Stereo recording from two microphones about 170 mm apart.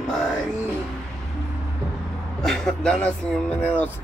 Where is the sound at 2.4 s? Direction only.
5° left (ahead or behind).